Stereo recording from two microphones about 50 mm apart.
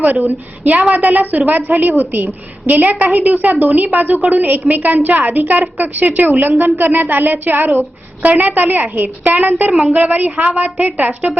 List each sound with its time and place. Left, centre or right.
0.0 s a woman's voice: right